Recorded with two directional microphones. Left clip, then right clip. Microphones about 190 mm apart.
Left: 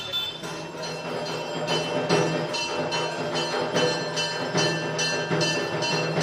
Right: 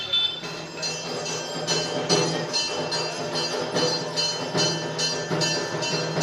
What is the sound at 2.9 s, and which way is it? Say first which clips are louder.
Music: left 1 dB; 5° right (ahead or behind).